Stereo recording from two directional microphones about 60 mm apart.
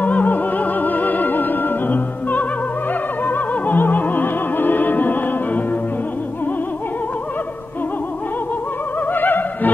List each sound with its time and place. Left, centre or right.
0.0 s music: left
9.1 s opera: left